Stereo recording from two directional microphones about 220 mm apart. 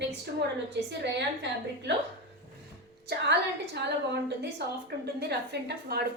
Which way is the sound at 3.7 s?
50° right (ahead or behind).